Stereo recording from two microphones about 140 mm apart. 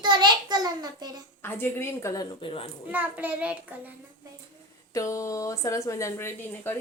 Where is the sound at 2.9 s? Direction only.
10° right (ahead or behind).